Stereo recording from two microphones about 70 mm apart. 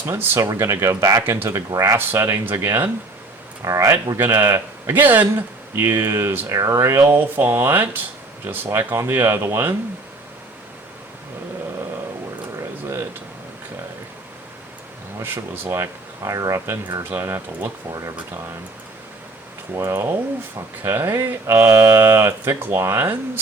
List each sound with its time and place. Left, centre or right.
0.0 s speech: right
0.3 s speech: right
3.6 s speech: right
4.2 s speech: right
5.7 s speech: right
15.2 s speech: right
15.7 s speech: right
16.6 s speech: right
19.8 s speech: right
21.7 s a sound: right
21.9 s speech: right